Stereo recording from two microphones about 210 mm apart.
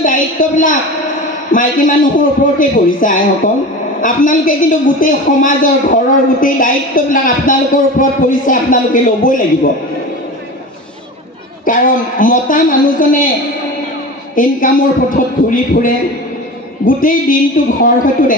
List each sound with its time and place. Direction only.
0.0 s a sound: 40° left (ahead or behind)
1.5 s speech: 40° left (ahead or behind)
11.6 s speech: 40° left (ahead or behind)
14.3 s speech: 40° left (ahead or behind)